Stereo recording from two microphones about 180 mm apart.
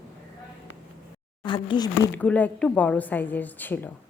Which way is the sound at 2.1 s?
10° left (ahead or behind).